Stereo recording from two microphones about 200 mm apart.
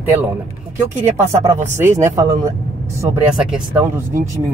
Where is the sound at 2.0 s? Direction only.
15° right (ahead or behind).